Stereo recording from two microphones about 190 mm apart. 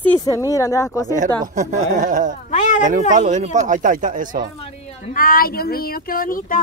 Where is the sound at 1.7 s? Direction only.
40° right (ahead or behind).